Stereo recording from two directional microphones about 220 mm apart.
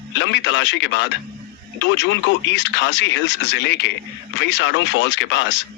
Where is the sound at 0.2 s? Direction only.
55° left (ahead or behind).